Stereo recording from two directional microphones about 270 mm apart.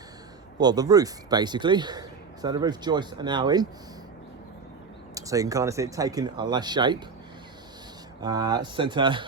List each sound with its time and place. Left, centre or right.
0.6 s speech: centre
5.1 s speech: centre
8.2 s speech: centre